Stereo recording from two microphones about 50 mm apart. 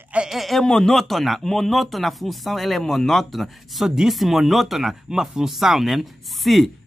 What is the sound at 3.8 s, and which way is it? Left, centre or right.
Speech, centre.